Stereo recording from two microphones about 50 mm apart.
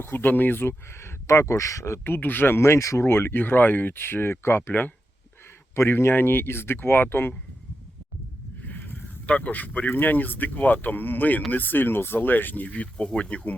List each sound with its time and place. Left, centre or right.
0.0 s speech: left
2.0 s speech: left
2.6 s speech: left
5.7 s speech: left
8.6 s a sound: left
9.2 s speech: left
12.6 s speech: left